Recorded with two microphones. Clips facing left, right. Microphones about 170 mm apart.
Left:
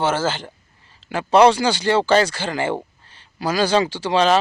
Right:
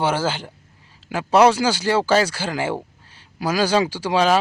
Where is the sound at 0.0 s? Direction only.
10° right (ahead or behind).